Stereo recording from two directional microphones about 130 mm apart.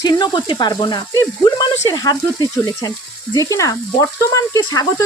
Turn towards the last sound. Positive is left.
turn(degrees=25)  # may be behind; listen again after turning